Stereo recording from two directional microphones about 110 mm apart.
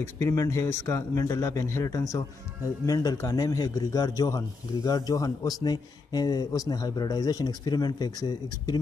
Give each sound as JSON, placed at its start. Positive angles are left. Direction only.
{"t": 0.2, "sound": "a man's voice", "side_deg": 30}